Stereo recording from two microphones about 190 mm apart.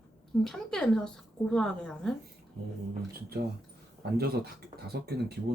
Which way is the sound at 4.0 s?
55° right (ahead or behind).